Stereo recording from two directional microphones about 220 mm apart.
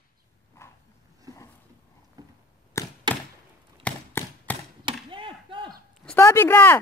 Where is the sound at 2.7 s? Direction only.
15° left (ahead or behind).